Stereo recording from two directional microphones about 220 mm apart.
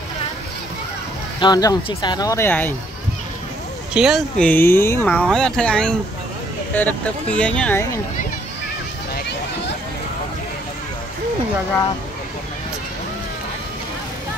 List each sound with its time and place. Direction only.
1.4 s speech: 20° left (ahead or behind)
3.9 s speech: 5° right (ahead or behind)